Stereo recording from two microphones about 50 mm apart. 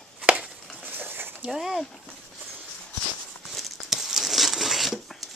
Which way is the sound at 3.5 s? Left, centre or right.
Centre.